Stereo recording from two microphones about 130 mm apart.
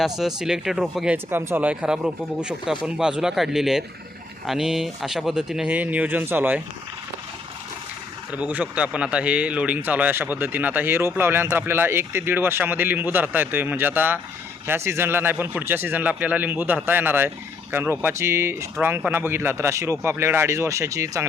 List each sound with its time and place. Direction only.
0.2 s speech: 5° right (ahead or behind)
1.1 s speech: 20° right (ahead or behind)
8.3 s speech: 10° right (ahead or behind)